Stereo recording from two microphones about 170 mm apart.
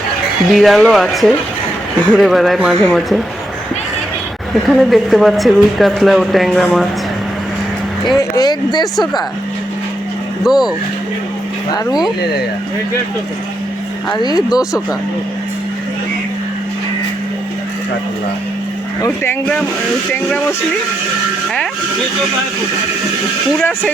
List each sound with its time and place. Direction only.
0.5 s speech: centre (ahead or behind)
4.5 s speech: centre (ahead or behind)
8.2 s speech: 20° left (ahead or behind)
10.5 s speech: 25° left (ahead or behind)
11.7 s speech: 25° left (ahead or behind)
14.2 s speech: 25° left (ahead or behind)
19.0 s speech: 15° left (ahead or behind)
23.6 s speech: 5° left (ahead or behind)